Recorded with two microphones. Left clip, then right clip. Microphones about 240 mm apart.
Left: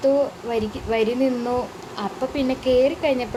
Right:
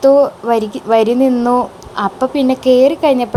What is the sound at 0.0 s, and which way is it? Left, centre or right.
A woman's voice, right.